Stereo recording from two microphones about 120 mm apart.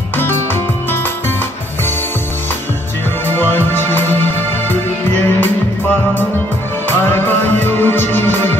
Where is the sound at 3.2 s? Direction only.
20° left (ahead or behind).